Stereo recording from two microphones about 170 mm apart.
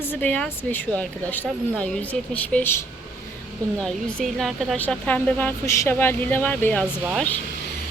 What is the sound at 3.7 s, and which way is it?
Speech, 5° left (ahead or behind).